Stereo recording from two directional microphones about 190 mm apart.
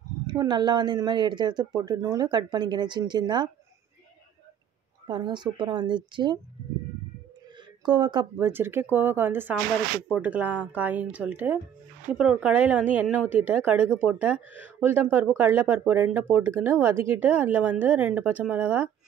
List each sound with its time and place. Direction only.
0.3 s speech: 25° right (ahead or behind)
5.0 s speech: 25° right (ahead or behind)
7.8 s speech: 25° right (ahead or behind)
8.5 s speech: 10° right (ahead or behind)